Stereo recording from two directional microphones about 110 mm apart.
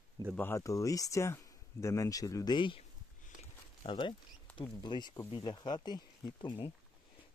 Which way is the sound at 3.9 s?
45° left (ahead or behind).